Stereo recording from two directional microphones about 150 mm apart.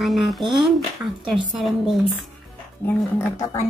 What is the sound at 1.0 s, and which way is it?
Speech, 15° right (ahead or behind).